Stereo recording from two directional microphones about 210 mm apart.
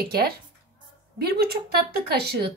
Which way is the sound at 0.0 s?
45° right (ahead or behind).